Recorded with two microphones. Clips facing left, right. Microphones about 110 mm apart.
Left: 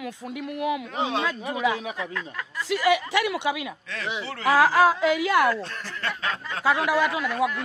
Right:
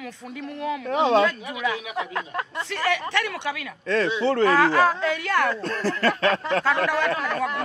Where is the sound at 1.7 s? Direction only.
35° left (ahead or behind).